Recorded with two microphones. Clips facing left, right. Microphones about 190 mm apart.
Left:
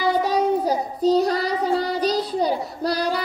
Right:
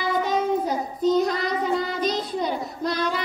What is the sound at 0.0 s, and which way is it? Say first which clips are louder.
Child singing: left 3 dB; 35° left (ahead or behind).